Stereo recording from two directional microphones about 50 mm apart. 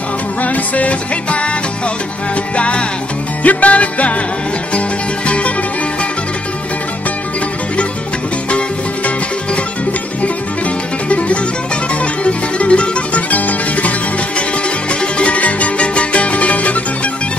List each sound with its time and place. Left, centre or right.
0.4 s music: left
2.5 s music: left
8.5 s music: left
11.1 s music: left